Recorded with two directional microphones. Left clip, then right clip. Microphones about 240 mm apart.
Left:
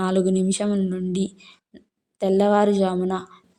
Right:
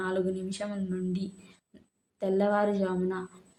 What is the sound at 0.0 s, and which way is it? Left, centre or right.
Speech, left.